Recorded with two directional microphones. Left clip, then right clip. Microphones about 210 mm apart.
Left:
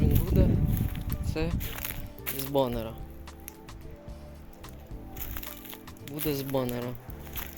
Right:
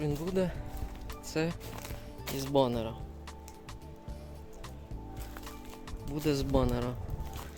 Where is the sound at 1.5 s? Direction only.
5° left (ahead or behind).